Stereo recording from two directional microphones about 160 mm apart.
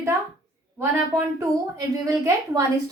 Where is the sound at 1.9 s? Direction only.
20° right (ahead or behind).